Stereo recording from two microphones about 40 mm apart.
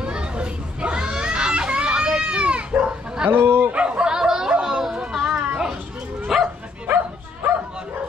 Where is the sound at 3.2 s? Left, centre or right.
Right.